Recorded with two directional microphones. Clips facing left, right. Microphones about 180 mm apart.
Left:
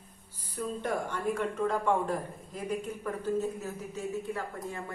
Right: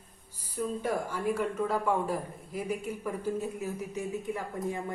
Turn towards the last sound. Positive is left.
turn(degrees=-15)  # may be behind; listen again after turning